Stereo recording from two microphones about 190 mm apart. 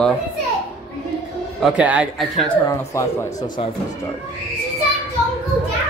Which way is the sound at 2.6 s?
15° left (ahead or behind).